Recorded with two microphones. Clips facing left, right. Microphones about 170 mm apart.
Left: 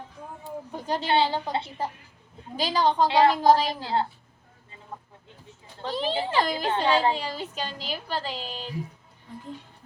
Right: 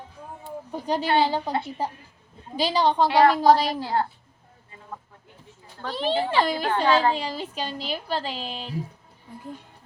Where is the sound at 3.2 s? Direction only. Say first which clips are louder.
Right 3 dB; 35° right (ahead or behind).